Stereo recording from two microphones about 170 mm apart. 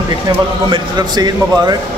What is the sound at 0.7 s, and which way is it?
A man's voice, 25° right (ahead or behind).